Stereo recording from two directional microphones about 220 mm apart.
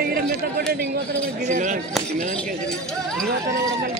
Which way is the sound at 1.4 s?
35° right (ahead or behind).